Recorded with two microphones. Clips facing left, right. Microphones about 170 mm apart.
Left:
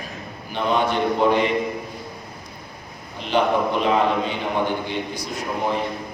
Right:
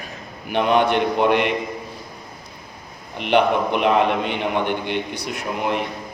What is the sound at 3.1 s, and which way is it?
A man's voice, 65° right (ahead or behind).